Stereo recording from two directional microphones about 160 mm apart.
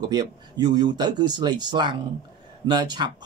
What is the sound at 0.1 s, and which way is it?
Speech, 25° right (ahead or behind).